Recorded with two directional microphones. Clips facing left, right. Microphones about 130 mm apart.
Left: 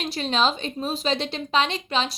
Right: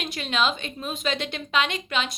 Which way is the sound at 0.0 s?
35° left (ahead or behind).